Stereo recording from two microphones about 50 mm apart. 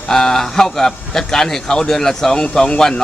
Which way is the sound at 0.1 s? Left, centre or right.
Centre.